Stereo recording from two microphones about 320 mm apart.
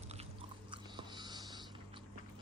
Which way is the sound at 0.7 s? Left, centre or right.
Centre.